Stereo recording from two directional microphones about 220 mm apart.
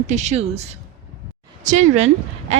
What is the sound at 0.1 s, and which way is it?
Speech, 30° right (ahead or behind).